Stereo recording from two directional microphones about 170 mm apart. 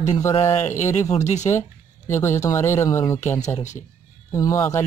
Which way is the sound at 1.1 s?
45° left (ahead or behind).